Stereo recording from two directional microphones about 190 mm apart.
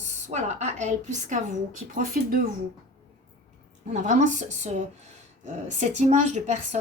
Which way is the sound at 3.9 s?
40° right (ahead or behind).